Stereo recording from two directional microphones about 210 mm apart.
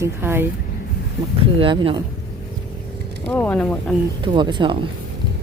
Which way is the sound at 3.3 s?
10° left (ahead or behind).